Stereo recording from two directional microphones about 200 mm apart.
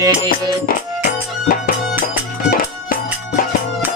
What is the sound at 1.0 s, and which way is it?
Music, 45° left (ahead or behind).